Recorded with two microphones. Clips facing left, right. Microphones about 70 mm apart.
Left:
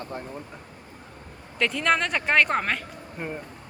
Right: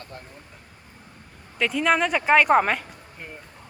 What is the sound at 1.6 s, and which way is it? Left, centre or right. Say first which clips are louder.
Speech: right 2 dB; centre.